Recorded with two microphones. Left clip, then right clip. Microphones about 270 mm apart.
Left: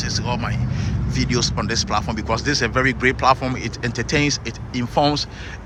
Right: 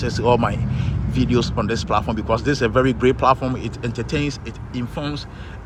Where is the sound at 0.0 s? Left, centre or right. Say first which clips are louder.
Right 7 dB; centre.